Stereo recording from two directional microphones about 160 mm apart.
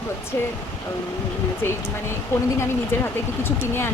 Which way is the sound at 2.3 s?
15° left (ahead or behind).